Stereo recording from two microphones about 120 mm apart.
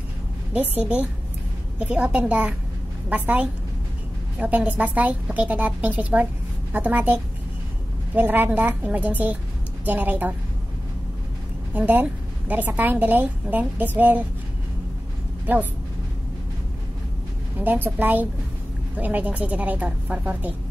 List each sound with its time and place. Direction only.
0.5 s a woman's voice: 10° right (ahead or behind)
11.7 s a woman's voice: 15° right (ahead or behind)
15.5 s a woman's voice: 15° right (ahead or behind)
17.6 s a woman's voice: 15° right (ahead or behind)